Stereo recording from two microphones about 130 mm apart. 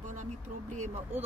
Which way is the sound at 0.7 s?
65° right (ahead or behind).